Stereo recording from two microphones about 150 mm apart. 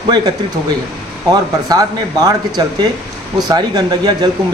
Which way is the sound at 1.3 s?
25° right (ahead or behind).